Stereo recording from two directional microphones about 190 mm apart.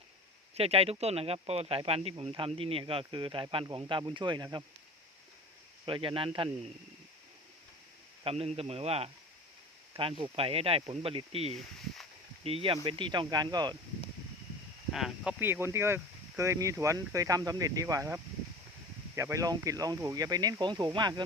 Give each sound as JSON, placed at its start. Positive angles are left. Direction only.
{"t": 0.5, "sound": "speech", "side_deg": -30}
{"t": 5.8, "sound": "speech", "side_deg": -25}
{"t": 8.2, "sound": "a man's voice", "side_deg": -30}
{"t": 14.9, "sound": "speech", "side_deg": 0}